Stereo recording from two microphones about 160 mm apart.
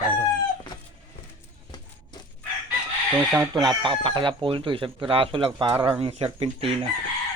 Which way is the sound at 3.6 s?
30° right (ahead or behind).